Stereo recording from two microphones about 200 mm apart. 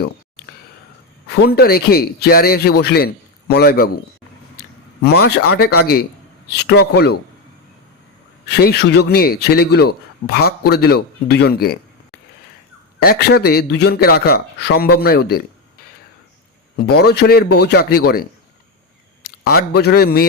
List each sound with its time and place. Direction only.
1.3 s speech: 50° left (ahead or behind)
5.0 s speech: 50° left (ahead or behind)
8.6 s speech: 55° left (ahead or behind)
13.0 s speech: 50° left (ahead or behind)
16.7 s a man's voice: 55° left (ahead or behind)